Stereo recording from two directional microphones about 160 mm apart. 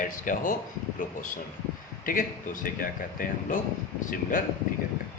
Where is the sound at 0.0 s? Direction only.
55° left (ahead or behind).